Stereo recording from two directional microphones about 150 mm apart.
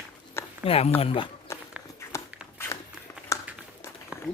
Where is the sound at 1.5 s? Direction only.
20° left (ahead or behind).